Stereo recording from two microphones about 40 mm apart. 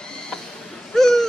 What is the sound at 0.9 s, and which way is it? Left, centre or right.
Bird, centre.